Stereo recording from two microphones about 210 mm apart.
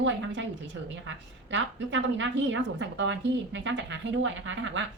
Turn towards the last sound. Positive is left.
turn(degrees=-60)  # may be behind; listen again after turning